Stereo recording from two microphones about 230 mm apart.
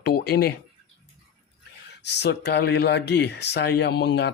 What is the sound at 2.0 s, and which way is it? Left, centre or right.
Speech, left.